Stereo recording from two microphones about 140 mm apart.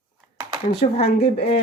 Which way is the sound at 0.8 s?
45° left (ahead or behind).